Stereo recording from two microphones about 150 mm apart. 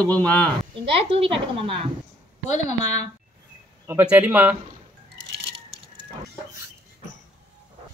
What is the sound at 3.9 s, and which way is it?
Speech, 15° right (ahead or behind).